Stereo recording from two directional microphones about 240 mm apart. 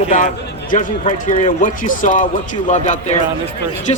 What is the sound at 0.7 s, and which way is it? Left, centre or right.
Speech, left.